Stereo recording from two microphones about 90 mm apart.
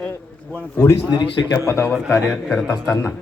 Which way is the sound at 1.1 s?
70° left (ahead or behind).